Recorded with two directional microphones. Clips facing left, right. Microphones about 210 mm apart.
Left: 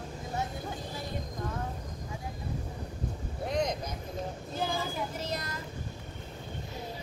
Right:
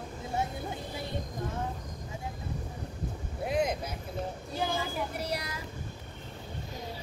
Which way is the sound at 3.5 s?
5° right (ahead or behind).